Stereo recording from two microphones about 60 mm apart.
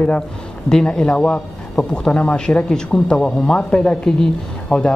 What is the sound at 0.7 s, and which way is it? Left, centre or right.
Speech, centre.